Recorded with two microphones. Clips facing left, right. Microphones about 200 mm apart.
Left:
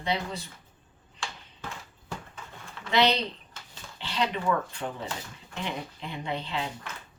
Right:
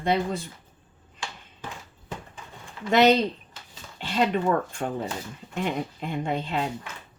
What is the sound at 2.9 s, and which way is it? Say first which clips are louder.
Speech: right 6 dB; 45° right (ahead or behind).